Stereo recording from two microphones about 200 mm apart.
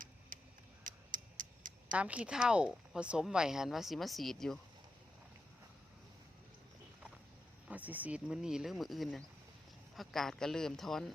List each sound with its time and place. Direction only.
0.3 s a sound: 45° right (ahead or behind)
0.9 s tick-tock: 40° right (ahead or behind)
1.9 s speech: 5° right (ahead or behind)
7.7 s speech: 10° right (ahead or behind)